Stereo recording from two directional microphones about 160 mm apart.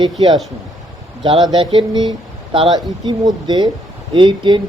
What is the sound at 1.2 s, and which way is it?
Speech, 30° right (ahead or behind).